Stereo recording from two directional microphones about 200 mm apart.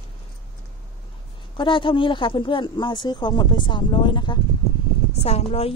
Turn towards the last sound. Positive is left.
turn(degrees=30)  # may be behind; listen again after turning